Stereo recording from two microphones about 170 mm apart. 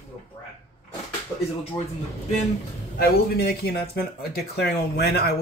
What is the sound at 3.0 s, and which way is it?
Speech, 65° left (ahead or behind).